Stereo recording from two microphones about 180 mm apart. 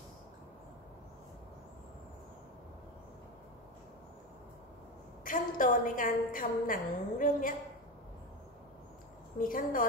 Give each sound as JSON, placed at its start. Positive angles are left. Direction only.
{"t": 5.2, "sound": "a woman's voice", "side_deg": 50}
{"t": 9.4, "sound": "a woman's voice", "side_deg": 50}